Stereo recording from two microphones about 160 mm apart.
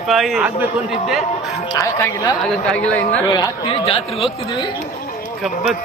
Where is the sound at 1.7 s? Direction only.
25° left (ahead or behind).